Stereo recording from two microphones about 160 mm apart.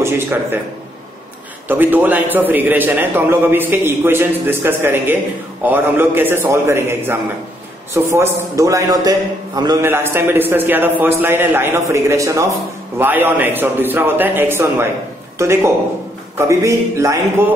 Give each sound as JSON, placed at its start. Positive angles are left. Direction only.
{"t": 0.0, "sound": "a man's voice", "side_deg": -15}
{"t": 1.7, "sound": "a man's voice", "side_deg": -10}